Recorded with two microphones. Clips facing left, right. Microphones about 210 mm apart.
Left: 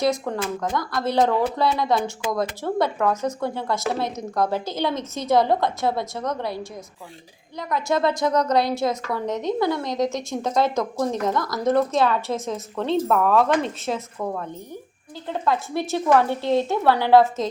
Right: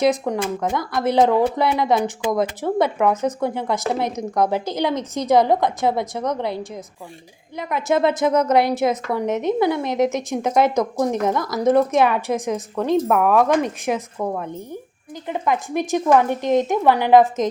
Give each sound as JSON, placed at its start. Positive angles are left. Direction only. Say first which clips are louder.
{"t": 0.0, "sound": "a woman's voice", "louder": "right 4 dB", "side_deg": -20}